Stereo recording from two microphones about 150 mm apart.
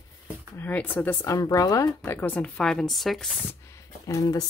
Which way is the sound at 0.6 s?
10° left (ahead or behind).